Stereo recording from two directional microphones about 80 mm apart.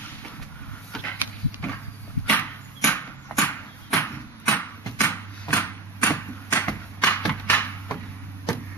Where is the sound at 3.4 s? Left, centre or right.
Centre.